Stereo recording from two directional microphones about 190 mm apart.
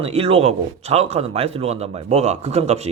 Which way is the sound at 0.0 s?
30° right (ahead or behind).